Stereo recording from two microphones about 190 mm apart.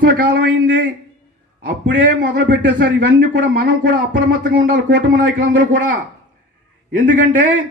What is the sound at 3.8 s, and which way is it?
Speech, 45° right (ahead or behind).